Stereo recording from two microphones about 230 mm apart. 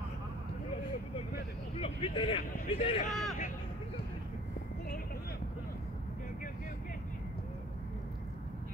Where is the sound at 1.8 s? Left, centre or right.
Left.